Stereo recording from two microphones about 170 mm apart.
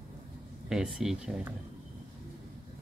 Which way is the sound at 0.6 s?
5° right (ahead or behind).